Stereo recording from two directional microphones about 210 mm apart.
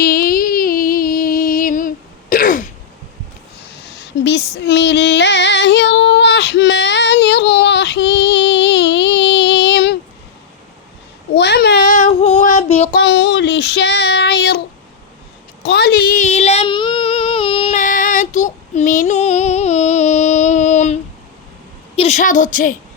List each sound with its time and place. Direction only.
0.0 s music: 45° left (ahead or behind)
2.3 s throat clearing: 40° left (ahead or behind)
3.7 s female singing: 55° left (ahead or behind)
11.3 s a sound: 55° left (ahead or behind)
12.0 s female singing: 30° left (ahead or behind)
12.9 s child singing: 55° left (ahead or behind)
15.6 s a sound: 50° left (ahead or behind); by 21.0 s 35° left (ahead or behind)
21.9 s a woman's voice: 30° left (ahead or behind)